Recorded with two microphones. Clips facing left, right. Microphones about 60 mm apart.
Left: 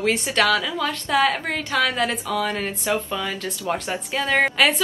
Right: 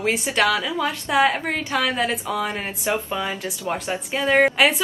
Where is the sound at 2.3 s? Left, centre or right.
Centre.